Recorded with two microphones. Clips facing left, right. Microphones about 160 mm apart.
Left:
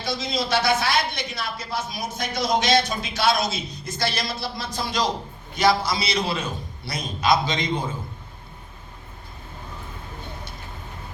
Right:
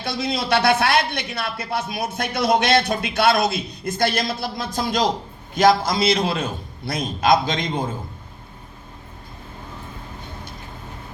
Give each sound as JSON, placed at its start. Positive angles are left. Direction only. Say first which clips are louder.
{"t": 0.0, "sound": "a man's voice", "louder": "right 2 dB", "side_deg": -60}